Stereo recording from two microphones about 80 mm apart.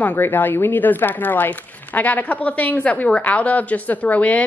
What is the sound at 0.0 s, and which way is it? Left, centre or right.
A woman's voice, left.